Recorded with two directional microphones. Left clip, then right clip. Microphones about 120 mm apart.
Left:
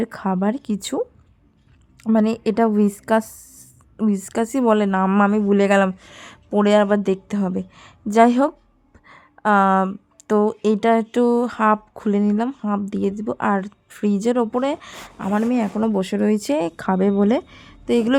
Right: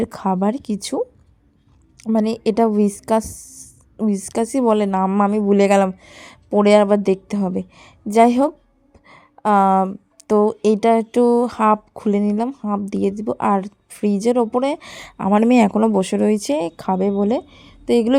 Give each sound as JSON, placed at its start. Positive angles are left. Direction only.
{"t": 0.0, "sound": "speech", "side_deg": -20}
{"t": 2.1, "sound": "a woman's voice", "side_deg": -15}
{"t": 9.0, "sound": "a sound", "side_deg": -15}
{"t": 10.2, "sound": "a woman's voice", "side_deg": -15}
{"t": 15.2, "sound": "speech", "side_deg": -35}
{"t": 15.4, "sound": "speech", "side_deg": -55}
{"t": 15.7, "sound": "speech", "side_deg": -30}
{"t": 16.3, "sound": "speech", "side_deg": -5}
{"t": 17.8, "sound": "a woman's voice", "side_deg": -15}